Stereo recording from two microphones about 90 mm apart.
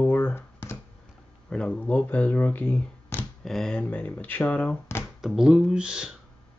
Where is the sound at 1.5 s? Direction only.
10° left (ahead or behind).